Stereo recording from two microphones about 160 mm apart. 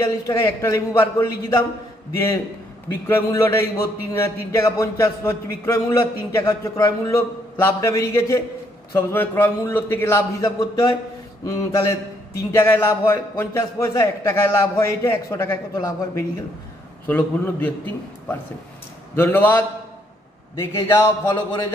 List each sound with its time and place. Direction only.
0.0 s speech: 20° left (ahead or behind)
2.9 s speech: 15° left (ahead or behind)
19.1 s speech: 10° left (ahead or behind)